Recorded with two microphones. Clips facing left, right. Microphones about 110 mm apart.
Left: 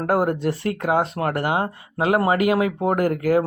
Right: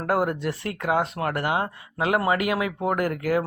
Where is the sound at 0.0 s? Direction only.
35° left (ahead or behind).